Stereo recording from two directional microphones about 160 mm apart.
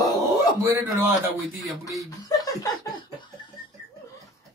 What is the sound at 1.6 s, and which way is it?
Speech, centre (ahead or behind).